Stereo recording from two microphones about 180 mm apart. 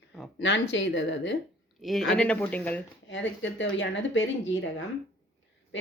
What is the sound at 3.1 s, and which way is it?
Speech, 90° left.